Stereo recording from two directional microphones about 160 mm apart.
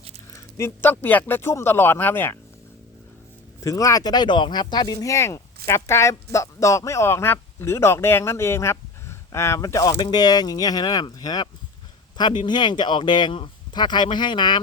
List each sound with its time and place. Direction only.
0.3 s speech: 15° left (ahead or behind)
3.6 s speech: 20° left (ahead or behind)